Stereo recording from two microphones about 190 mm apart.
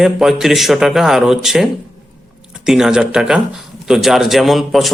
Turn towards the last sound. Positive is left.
turn(degrees=0)  # may be behind; listen again after turning